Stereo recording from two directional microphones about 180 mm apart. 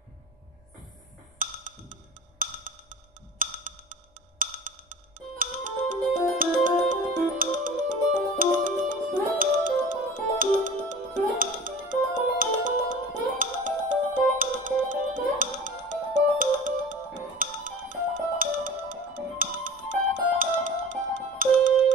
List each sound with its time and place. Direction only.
1.4 s music: 45° right (ahead or behind)